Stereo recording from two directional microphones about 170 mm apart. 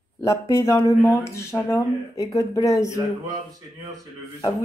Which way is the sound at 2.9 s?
20° right (ahead or behind).